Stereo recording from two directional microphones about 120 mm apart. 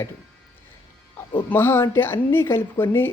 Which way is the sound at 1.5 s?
20° left (ahead or behind).